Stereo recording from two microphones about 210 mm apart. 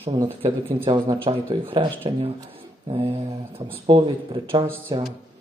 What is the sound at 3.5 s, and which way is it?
A man's voice, 25° right (ahead or behind).